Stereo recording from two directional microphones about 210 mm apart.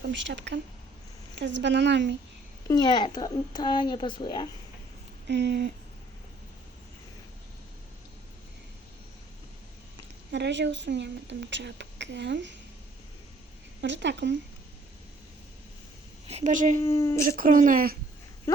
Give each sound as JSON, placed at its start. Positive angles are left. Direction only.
{"t": 0.1, "sound": "speech", "side_deg": -60}
{"t": 2.6, "sound": "speech", "side_deg": 20}
{"t": 5.3, "sound": "speech", "side_deg": -55}
{"t": 10.3, "sound": "speech", "side_deg": -55}
{"t": 13.8, "sound": "speech", "side_deg": -60}
{"t": 16.2, "sound": "speech", "side_deg": -30}
{"t": 16.8, "sound": "speech", "side_deg": 15}
{"t": 17.2, "sound": "speech", "side_deg": -40}